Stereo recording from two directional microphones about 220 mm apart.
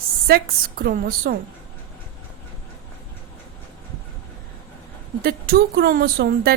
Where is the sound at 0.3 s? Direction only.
40° right (ahead or behind).